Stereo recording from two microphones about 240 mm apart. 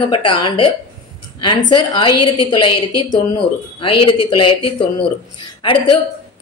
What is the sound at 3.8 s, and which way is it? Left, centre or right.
A woman's voice, left.